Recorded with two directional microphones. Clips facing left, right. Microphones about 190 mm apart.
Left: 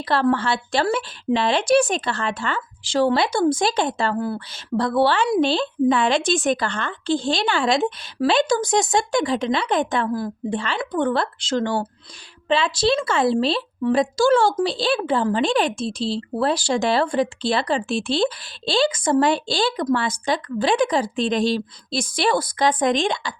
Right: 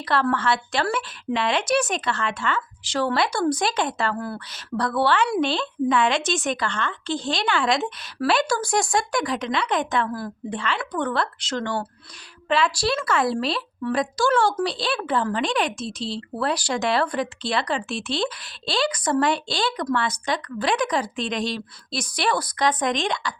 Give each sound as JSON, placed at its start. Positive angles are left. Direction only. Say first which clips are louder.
{"t": 0.0, "sound": "a woman's voice", "louder": "left 3 dB", "side_deg": 30}
{"t": 10.2, "sound": "a woman's voice", "louder": "left 5 dB", "side_deg": 20}